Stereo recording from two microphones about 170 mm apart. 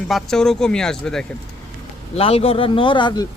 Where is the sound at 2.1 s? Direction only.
35° left (ahead or behind).